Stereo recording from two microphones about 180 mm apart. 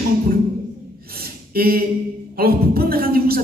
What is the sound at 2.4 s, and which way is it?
A woman's voice, 55° right (ahead or behind).